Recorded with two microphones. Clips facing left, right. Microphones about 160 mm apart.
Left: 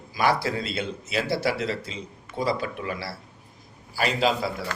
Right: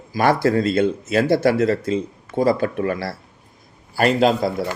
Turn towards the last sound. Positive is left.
turn(degrees=-50)  # may be behind; listen again after turning